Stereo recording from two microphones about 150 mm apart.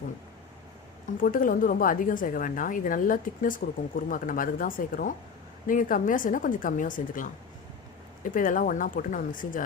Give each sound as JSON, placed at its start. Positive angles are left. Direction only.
{"t": 1.0, "sound": "a woman's voice", "side_deg": 65}